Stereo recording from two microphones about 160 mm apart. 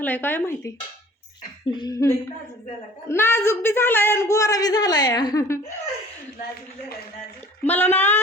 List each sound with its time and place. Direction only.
0.0 s a woman's voice: 10° left (ahead or behind)
1.7 s a sound: 25° left (ahead or behind)
3.1 s a woman's voice: 15° left (ahead or behind)
7.6 s a woman's voice: 10° left (ahead or behind)